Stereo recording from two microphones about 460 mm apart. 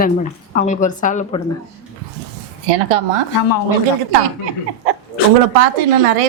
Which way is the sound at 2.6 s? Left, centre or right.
Right.